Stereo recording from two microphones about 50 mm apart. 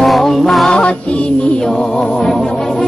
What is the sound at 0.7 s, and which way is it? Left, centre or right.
Music, left.